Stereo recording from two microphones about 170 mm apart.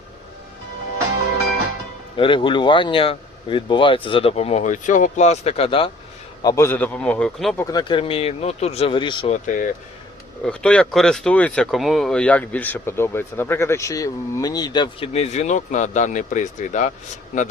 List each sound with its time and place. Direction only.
2.1 s speech: 30° left (ahead or behind)
6.4 s speech: 20° left (ahead or behind)
7.6 s speech: 25° left (ahead or behind)
9.3 s speech: 50° left (ahead or behind)
10.4 s speech: 5° left (ahead or behind); by 16.9 s 45° left (ahead or behind)